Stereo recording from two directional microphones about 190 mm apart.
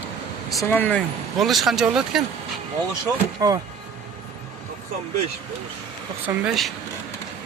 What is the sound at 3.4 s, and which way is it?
Speech, 20° right (ahead or behind).